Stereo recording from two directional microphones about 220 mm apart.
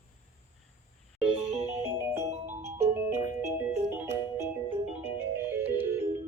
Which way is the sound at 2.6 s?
10° right (ahead or behind).